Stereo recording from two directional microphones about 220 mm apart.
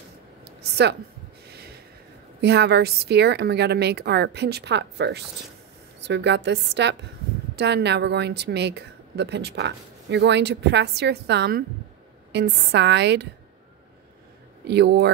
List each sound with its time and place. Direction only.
0.6 s a sound: 50° right (ahead or behind)
2.4 s a woman's voice: 50° right (ahead or behind)
14.7 s a woman's voice: 50° right (ahead or behind)